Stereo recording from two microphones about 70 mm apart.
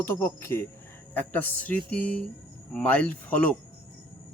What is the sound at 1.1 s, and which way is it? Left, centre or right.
Speech, left.